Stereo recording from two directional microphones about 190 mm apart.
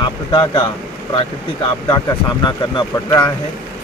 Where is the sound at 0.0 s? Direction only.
25° left (ahead or behind).